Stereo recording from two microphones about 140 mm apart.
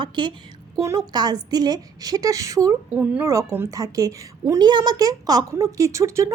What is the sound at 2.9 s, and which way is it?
A woman's voice, 15° right (ahead or behind).